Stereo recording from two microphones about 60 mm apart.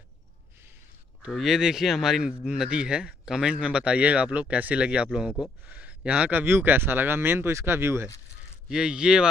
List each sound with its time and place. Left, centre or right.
1.3 s a man's voice: centre; by 6.3 s right
6.3 s speech: right
8.6 s a man's voice: centre